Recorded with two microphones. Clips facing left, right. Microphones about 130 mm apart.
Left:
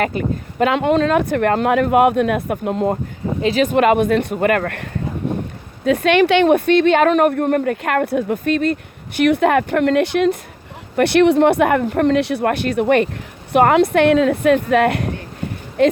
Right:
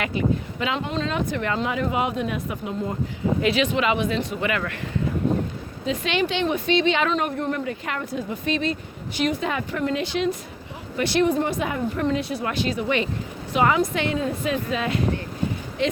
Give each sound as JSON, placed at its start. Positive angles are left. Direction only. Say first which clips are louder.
{"t": 0.0, "sound": "speech", "louder": "left 4 dB", "side_deg": 50}
{"t": 3.4, "sound": "speech", "louder": "left 9 dB", "side_deg": 45}